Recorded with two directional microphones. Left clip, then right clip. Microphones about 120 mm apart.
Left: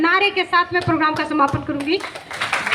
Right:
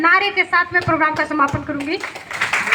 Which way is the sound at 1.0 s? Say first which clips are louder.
Right 1 dB; 20° left (ahead or behind).